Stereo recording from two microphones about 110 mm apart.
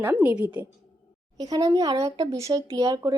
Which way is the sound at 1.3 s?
35° right (ahead or behind).